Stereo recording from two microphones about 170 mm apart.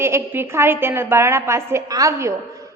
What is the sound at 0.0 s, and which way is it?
A woman's voice, 15° right (ahead or behind).